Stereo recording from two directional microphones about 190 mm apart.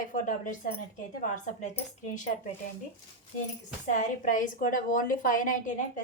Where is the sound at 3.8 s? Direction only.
40° left (ahead or behind).